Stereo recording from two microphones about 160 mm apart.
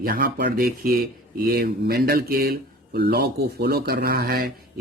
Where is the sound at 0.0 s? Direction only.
65° right (ahead or behind).